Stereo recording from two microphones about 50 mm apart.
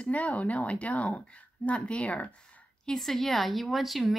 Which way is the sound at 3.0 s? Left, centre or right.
Centre.